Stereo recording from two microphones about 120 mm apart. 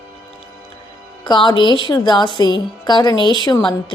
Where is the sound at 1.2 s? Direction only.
40° left (ahead or behind).